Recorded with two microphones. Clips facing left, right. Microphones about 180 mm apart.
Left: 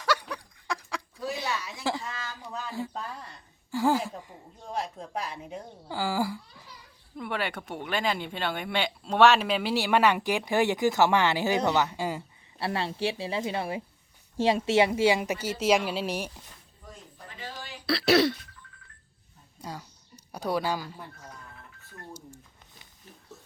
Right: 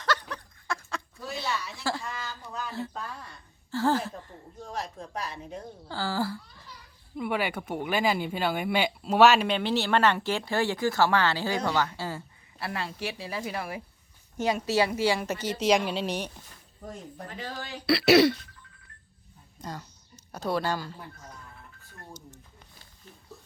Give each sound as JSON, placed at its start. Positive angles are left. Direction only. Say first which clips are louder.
{"t": 0.0, "sound": "a sound", "louder": "left 1 dB", "side_deg": 10}
{"t": 3.7, "sound": "speech", "louder": "left 1 dB", "side_deg": 10}
{"t": 7.2, "sound": "speech", "louder": "right 3 dB", "side_deg": -10}
{"t": 12.5, "sound": "speech", "louder": "left 4 dB", "side_deg": 30}
{"t": 17.8, "sound": "speech", "louder": "right 3 dB", "side_deg": -5}
{"t": 19.6, "sound": "speech", "louder": "right 1 dB", "side_deg": 10}